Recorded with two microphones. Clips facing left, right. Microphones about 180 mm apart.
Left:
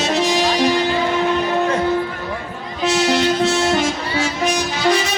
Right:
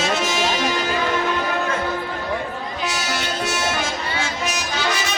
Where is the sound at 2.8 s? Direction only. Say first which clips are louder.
Left 12 dB; 25° left (ahead or behind).